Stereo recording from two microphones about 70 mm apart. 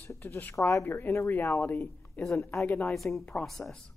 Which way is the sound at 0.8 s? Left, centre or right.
Left.